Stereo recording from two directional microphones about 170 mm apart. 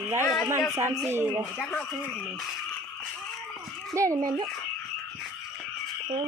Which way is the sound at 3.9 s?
20° right (ahead or behind).